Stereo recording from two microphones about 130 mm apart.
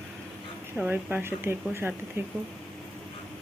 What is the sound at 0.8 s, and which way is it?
Speech, 10° right (ahead or behind).